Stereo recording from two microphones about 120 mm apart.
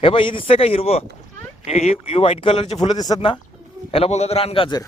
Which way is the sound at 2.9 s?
30° left (ahead or behind).